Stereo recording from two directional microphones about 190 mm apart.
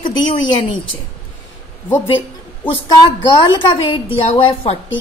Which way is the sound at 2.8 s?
25° left (ahead or behind).